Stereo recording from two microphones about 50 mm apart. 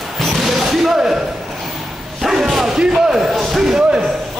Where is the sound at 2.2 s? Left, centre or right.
Centre.